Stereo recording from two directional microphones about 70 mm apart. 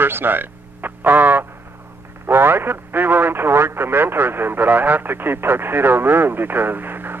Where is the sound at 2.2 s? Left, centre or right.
Right.